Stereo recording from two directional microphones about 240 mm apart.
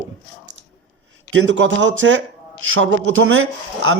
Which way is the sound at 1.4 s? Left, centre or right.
Right.